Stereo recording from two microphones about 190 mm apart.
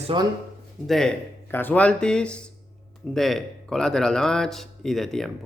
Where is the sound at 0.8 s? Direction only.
Centre (ahead or behind).